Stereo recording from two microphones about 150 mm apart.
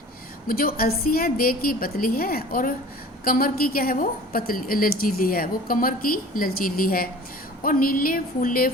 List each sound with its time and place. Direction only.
0.4 s a woman's voice: 75° left (ahead or behind)